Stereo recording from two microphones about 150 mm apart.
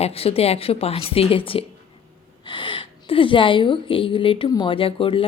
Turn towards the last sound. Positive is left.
turn(degrees=35)  # may be behind; listen again after turning